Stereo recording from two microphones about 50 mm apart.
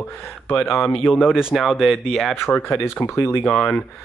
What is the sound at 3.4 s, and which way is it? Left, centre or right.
Speech, left.